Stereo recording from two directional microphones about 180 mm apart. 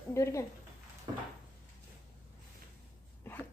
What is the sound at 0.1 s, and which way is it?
Speech, 15° left (ahead or behind).